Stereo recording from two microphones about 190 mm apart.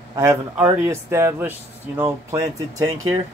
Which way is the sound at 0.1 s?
15° right (ahead or behind).